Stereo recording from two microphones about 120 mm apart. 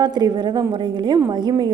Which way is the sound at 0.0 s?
35° right (ahead or behind).